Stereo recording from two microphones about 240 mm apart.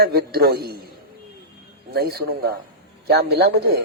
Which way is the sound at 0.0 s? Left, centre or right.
Right.